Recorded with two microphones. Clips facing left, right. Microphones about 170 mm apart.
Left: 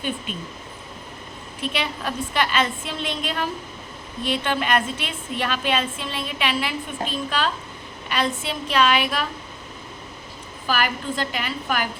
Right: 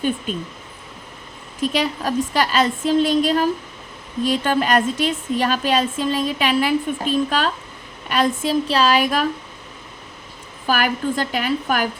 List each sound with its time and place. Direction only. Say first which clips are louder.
1.6 s a woman's voice: right 6 dB; 40° right (ahead or behind)
8.6 s a woman's voice: even; 35° right (ahead or behind)
10.7 s a woman's voice: right 4 dB; 45° right (ahead or behind)